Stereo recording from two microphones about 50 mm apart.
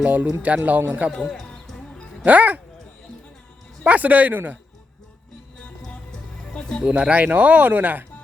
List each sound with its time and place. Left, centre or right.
0.0 s speech: right
1.1 s music: centre
2.2 s speech: right
3.8 s speech: right
5.9 s music: left
6.8 s speech: right